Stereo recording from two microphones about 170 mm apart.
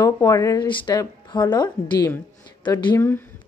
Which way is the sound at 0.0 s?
20° left (ahead or behind).